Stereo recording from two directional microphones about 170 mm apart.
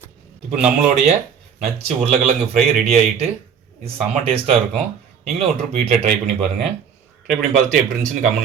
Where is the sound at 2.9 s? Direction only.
40° right (ahead or behind).